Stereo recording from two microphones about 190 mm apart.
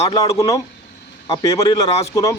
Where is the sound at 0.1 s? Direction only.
15° left (ahead or behind).